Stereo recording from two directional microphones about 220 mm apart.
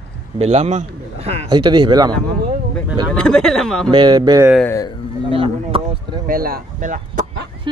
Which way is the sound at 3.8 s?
20° right (ahead or behind).